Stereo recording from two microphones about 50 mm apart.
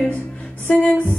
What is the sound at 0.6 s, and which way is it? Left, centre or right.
Music, left.